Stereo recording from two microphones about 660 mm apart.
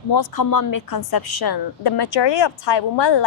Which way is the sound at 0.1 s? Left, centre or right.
Left.